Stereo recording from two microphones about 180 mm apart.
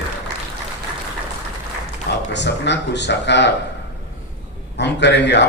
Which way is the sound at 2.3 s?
75° left (ahead or behind).